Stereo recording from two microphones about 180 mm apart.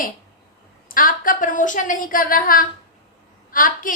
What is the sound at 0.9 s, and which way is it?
A woman's voice, 50° left (ahead or behind).